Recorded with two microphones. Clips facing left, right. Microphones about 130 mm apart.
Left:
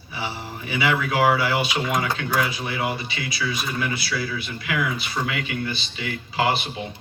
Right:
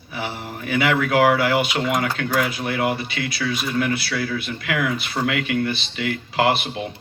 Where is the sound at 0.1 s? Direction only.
55° right (ahead or behind).